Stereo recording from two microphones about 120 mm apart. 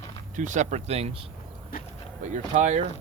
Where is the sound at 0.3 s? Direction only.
90° right; by 1.1 s 60° right (ahead or behind).